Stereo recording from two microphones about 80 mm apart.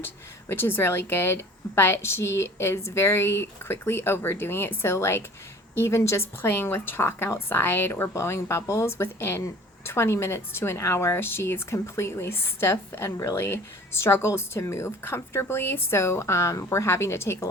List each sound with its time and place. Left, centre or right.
0.0 s a woman's voice: left
13.3 s a woman's voice: left